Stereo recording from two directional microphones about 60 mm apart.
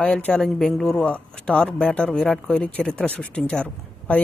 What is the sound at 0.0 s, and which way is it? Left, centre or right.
Speech, centre.